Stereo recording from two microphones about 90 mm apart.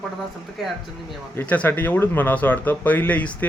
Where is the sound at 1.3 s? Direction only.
15° left (ahead or behind).